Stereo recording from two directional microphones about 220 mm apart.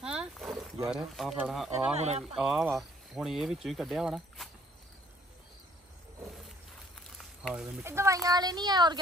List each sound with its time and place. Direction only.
0.0 s boat: 5° right (ahead or behind)
0.8 s speech: centre (ahead or behind)
2.0 s speech: 30° right (ahead or behind)
2.3 s speech: 5° right (ahead or behind)
7.0 s speech: centre (ahead or behind); by 8.9 s 20° right (ahead or behind)